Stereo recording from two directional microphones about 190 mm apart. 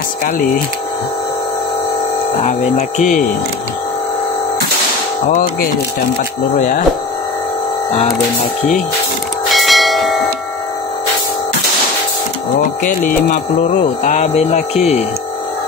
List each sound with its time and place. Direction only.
0.2 s speech: 50° left (ahead or behind)
3.0 s speech: 40° left (ahead or behind)
5.3 s speech: 50° left (ahead or behind)
6.5 s music: 40° left (ahead or behind)
9.5 s church bell: centre (ahead or behind)
13.3 s music: 40° left (ahead or behind)